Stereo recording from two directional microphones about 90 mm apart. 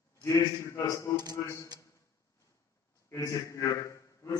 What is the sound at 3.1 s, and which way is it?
A man's voice, 35° left (ahead or behind).